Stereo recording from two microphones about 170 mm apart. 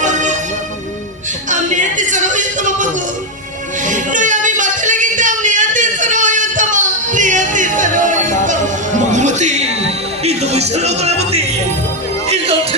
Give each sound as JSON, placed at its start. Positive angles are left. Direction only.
{"t": 0.0, "sound": "music", "side_deg": -45}
{"t": 1.5, "sound": "music", "side_deg": -45}